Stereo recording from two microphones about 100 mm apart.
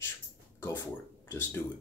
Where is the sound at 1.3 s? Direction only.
20° left (ahead or behind).